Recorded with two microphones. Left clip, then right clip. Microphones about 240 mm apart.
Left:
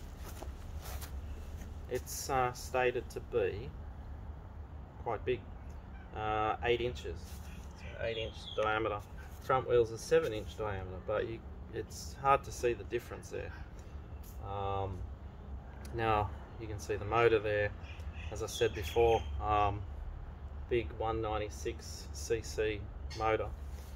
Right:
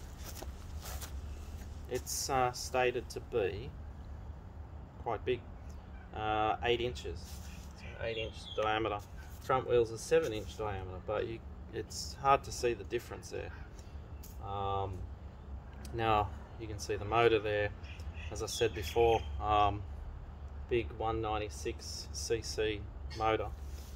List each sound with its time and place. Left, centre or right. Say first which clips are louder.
0.4 s a sound: right 1 dB; right
1.9 s speech: right 1 dB; right
5.0 s speech: even; right
14.5 s speech: right 1 dB; right
20.7 s speech: even; right